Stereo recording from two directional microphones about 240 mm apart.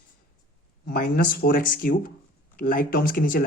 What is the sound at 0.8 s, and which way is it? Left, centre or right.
Speech, left.